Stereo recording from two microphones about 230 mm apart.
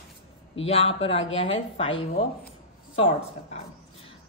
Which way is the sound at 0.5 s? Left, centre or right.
Left.